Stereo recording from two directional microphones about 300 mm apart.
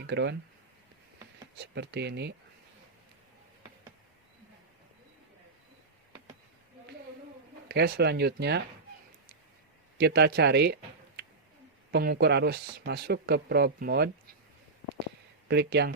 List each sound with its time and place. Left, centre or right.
0.1 s speech: right
1.5 s speech: right
7.7 s speech: right
10.0 s speech: right
11.9 s speech: right
15.4 s speech: right